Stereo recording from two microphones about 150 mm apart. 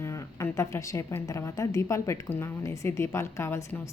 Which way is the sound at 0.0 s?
15° left (ahead or behind).